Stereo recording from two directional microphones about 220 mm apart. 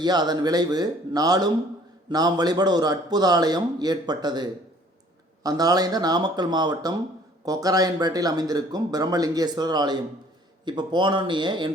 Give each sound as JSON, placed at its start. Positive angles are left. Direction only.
{"t": 0.0, "sound": "speech", "side_deg": -20}